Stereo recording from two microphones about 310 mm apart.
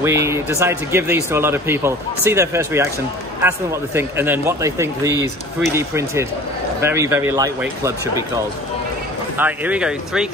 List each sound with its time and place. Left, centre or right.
0.0 s speech: centre
9.4 s speech: centre